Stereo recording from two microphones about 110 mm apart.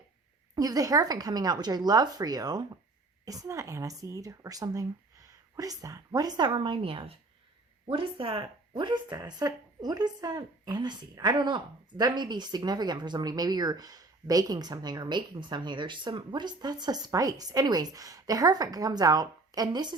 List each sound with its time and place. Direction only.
0.5 s speech: 35° right (ahead or behind)